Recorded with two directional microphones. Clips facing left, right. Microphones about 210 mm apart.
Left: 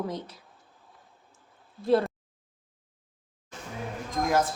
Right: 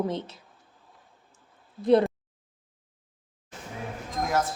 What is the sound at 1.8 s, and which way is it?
Speech, 20° right (ahead or behind).